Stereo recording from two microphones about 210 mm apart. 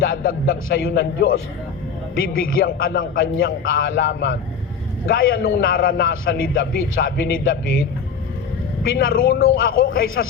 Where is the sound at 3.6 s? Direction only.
65° left (ahead or behind).